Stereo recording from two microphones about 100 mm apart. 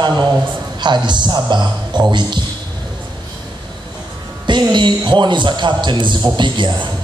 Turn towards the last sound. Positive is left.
turn(degrees=-50)  # may be behind; listen again after turning